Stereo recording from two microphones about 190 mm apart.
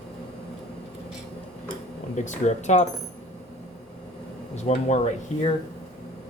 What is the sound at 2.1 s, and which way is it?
Speech, 40° left (ahead or behind).